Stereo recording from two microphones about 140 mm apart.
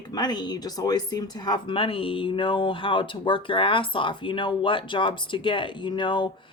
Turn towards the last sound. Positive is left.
turn(degrees=35)  # may be behind; listen again after turning